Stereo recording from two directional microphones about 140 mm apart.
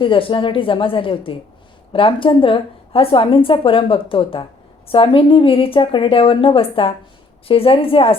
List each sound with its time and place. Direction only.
0.0 s a woman's voice: 40° left (ahead or behind)